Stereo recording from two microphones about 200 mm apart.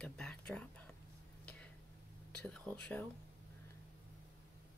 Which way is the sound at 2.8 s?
5° left (ahead or behind).